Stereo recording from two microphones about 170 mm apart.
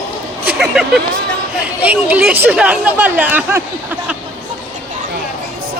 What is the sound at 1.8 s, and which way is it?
Speech, 10° right (ahead or behind).